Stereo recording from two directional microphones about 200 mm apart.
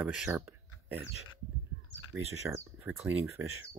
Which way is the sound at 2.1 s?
10° right (ahead or behind).